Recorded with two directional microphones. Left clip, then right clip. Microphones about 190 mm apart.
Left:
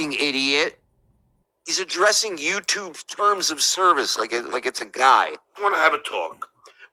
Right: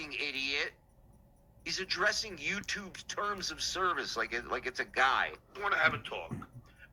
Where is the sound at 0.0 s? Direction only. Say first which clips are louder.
Left 13 dB; 50° left (ahead or behind).